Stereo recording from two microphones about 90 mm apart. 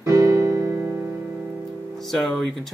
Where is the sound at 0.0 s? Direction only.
40° right (ahead or behind).